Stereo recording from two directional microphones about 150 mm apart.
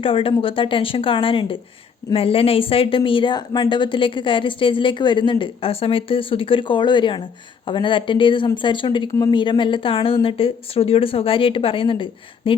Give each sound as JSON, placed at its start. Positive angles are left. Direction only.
{"t": 0.0, "sound": "a woman's voice", "side_deg": 35}